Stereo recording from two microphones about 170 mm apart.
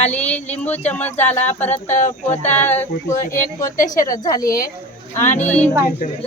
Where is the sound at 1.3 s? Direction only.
40° left (ahead or behind).